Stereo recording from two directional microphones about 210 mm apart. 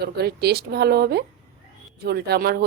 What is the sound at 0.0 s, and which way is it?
Speech, 50° right (ahead or behind).